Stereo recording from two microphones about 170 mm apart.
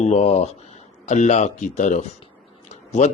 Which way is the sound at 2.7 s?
40° left (ahead or behind).